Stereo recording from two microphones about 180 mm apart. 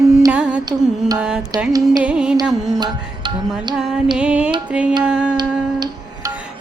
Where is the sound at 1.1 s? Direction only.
5° right (ahead or behind).